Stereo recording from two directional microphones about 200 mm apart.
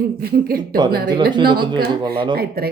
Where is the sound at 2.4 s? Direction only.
50° right (ahead or behind).